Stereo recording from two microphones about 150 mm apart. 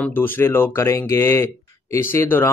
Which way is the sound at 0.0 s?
10° left (ahead or behind).